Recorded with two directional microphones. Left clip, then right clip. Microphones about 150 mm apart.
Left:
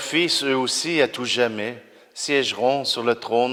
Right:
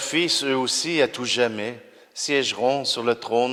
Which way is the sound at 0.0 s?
25° left (ahead or behind).